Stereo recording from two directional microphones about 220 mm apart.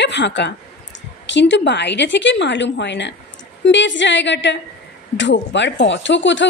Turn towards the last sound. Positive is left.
turn(degrees=55)  # may be behind; listen again after turning